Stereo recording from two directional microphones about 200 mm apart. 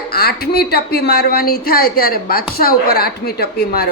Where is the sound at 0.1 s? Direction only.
50° left (ahead or behind).